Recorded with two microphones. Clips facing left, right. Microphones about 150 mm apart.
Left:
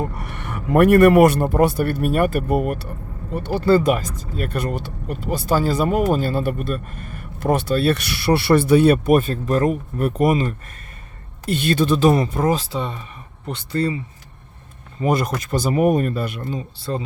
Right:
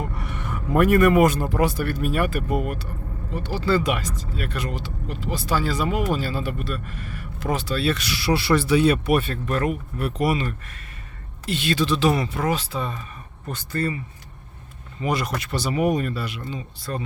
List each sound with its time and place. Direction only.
0.2 s a man's voice: 60° left (ahead or behind); by 12.8 s 40° left (ahead or behind)
13.4 s speech: 20° left (ahead or behind)
15.0 s speech: 45° left (ahead or behind)
16.7 s speech: 30° left (ahead or behind)